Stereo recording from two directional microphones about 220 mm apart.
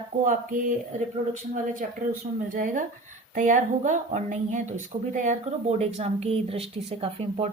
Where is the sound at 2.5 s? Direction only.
40° right (ahead or behind).